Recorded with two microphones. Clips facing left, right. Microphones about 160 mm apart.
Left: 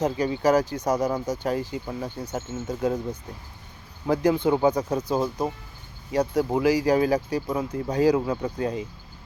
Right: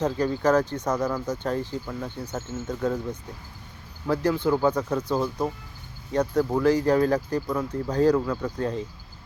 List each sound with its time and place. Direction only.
0.0 s speech: 10° left (ahead or behind)
8.2 s speech: 25° left (ahead or behind)
8.5 s speech: 10° left (ahead or behind)